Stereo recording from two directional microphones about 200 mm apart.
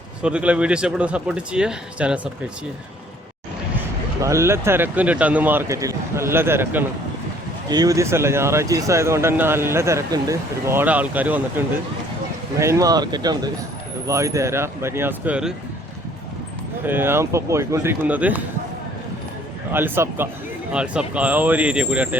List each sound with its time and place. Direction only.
0.2 s speech: 5° right (ahead or behind)
4.2 s speech: 15° right (ahead or behind)
16.8 s speech: 10° right (ahead or behind)
19.7 s speech: 10° right (ahead or behind)